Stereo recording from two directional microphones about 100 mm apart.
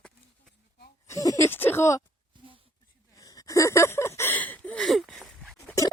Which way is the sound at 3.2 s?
35° left (ahead or behind).